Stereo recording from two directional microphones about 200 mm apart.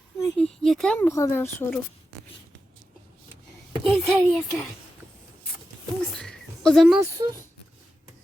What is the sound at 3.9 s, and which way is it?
Speech, centre (ahead or behind).